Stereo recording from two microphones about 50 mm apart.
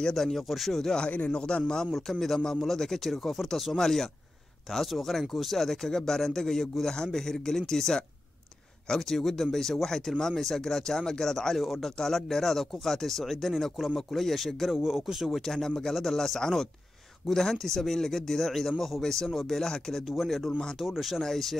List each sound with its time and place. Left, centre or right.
0.0 s speech: centre
1.0 s speech: left
1.9 s speech: centre
14.8 s speech: centre